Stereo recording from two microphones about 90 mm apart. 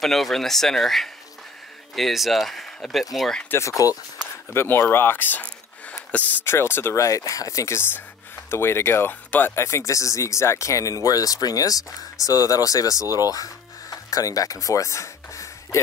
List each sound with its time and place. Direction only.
0.0 s speech: centre (ahead or behind)
3.4 s speech: 30° left (ahead or behind)
4.5 s speech: 25° left (ahead or behind)